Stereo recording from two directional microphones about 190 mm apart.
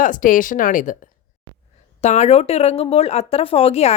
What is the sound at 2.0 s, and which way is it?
Speech, 35° left (ahead or behind).